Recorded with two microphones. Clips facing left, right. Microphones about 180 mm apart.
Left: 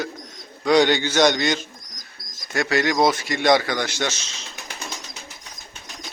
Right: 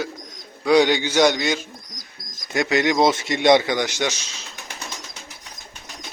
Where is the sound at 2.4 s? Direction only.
20° right (ahead or behind).